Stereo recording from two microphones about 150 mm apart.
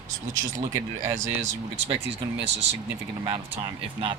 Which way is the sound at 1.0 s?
50° right (ahead or behind).